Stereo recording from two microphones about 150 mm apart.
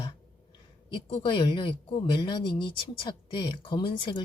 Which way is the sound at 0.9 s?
35° left (ahead or behind).